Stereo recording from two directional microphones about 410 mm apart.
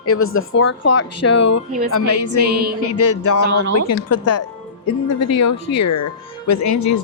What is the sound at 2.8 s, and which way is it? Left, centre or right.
Speech, left.